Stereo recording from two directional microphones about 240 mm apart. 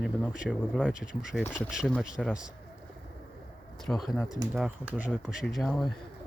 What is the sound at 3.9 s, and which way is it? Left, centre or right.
Speech, centre.